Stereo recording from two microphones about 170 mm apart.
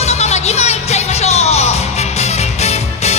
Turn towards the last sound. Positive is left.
turn(degrees=40)  # may be behind; listen again after turning